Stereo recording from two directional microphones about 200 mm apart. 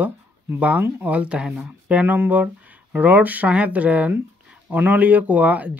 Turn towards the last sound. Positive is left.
turn(degrees=-5)  # may be behind; listen again after turning